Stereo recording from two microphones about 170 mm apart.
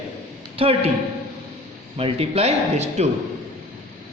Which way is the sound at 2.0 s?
35° right (ahead or behind).